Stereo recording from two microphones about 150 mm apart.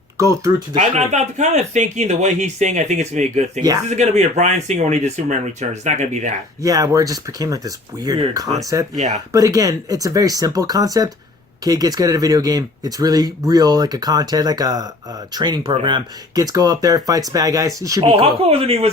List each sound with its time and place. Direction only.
0.2 s speech: 20° right (ahead or behind)
0.8 s speech: 50° right (ahead or behind)
6.6 s speech: 20° right (ahead or behind)
9.0 s speech: 50° right (ahead or behind)
9.3 s speech: 25° right (ahead or behind)
18.0 s speech: 40° right (ahead or behind)